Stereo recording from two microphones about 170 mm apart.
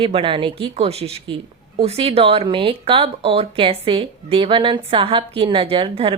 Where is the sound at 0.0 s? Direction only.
30° right (ahead or behind).